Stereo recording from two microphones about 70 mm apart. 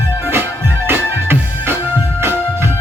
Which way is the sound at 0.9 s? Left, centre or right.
Right.